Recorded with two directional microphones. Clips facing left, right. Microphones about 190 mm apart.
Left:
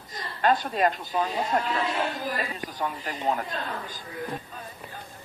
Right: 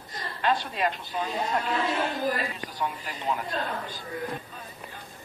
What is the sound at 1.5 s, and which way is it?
Speech, 45° left (ahead or behind).